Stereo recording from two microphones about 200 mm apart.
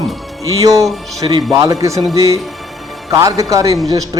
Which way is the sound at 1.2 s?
20° right (ahead or behind).